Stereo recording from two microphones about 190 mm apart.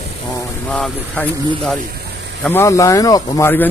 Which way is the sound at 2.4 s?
15° left (ahead or behind).